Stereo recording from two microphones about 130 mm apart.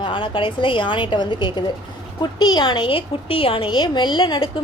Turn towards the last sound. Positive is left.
turn(degrees=35)  # may be behind; listen again after turning